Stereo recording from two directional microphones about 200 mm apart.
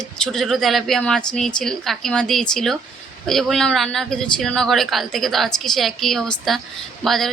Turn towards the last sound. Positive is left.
turn(degrees=0)  # may be behind; listen again after turning